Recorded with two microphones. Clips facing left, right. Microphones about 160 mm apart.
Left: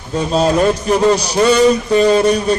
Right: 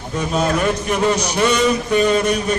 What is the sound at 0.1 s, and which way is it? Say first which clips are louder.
A man's voice: left 5 dB; 30° left (ahead or behind).